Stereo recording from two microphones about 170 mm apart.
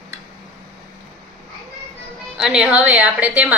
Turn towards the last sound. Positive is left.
turn(degrees=-10)  # may be behind; listen again after turning